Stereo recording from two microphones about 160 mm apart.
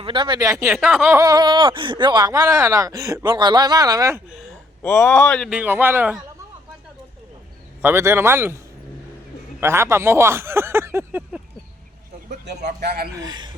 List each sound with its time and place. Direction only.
0.0 s speech: 30° right (ahead or behind)
0.6 s a man's voice: 10° right (ahead or behind)
1.2 s speech: 25° right (ahead or behind)
4.8 s speech: 15° left (ahead or behind); by 6.1 s 10° right (ahead or behind)
7.8 s a man's voice: 15° right (ahead or behind)
12.8 s speech: 75° right (ahead or behind)
13.1 s speech: 25° right (ahead or behind)